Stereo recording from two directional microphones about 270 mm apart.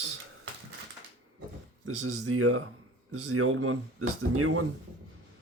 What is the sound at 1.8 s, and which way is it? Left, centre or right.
Speech, right.